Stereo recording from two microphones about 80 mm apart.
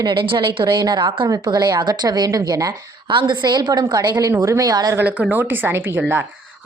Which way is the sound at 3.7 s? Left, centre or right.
Right.